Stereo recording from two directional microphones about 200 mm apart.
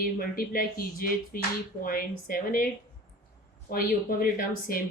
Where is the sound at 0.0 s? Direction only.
50° left (ahead or behind).